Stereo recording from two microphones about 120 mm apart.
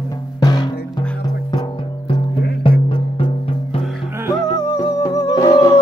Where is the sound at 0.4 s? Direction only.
35° left (ahead or behind).